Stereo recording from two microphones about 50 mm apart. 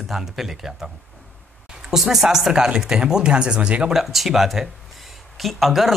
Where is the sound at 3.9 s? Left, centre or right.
Centre.